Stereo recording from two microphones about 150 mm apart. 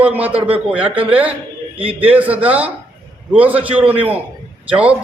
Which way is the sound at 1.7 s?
40° right (ahead or behind).